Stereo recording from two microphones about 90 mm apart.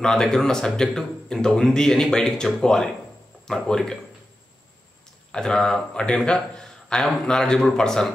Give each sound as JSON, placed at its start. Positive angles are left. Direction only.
{"t": 0.0, "sound": "speech", "side_deg": 5}
{"t": 5.3, "sound": "speech", "side_deg": 5}